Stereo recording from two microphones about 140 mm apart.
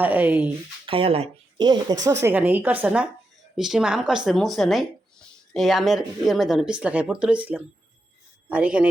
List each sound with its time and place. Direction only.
0.0 s speech: 10° right (ahead or behind)
0.9 s speech: 40° right (ahead or behind)
2.2 s speech: 15° right (ahead or behind)